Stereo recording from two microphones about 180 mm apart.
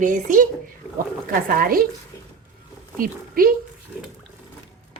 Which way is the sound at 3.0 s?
55° right (ahead or behind).